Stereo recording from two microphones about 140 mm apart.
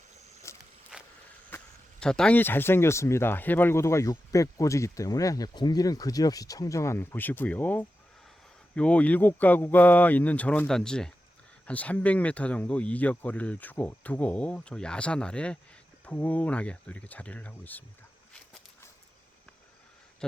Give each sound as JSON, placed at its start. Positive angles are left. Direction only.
{"t": 0.5, "sound": "walk", "side_deg": 20}
{"t": 0.9, "sound": "a sound", "side_deg": -5}
{"t": 1.5, "sound": "speech", "side_deg": 10}